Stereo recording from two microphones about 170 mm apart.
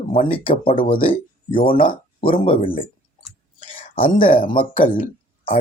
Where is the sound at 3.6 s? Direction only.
30° left (ahead or behind).